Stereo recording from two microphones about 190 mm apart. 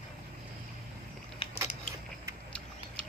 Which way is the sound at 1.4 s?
30° left (ahead or behind).